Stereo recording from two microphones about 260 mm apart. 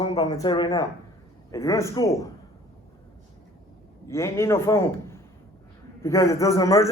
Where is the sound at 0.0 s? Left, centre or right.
Left.